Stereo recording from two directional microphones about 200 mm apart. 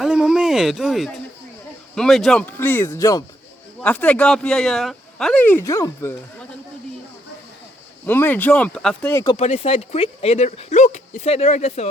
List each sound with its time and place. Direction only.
0.0 s a sound: 5° right (ahead or behind)
2.0 s speech: centre (ahead or behind)
8.0 s speech: 10° left (ahead or behind)
9.3 s speech: 30° left (ahead or behind)